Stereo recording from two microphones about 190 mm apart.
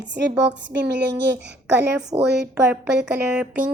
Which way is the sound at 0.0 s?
70° right (ahead or behind).